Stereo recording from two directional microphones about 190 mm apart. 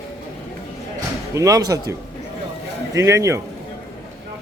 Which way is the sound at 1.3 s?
15° right (ahead or behind).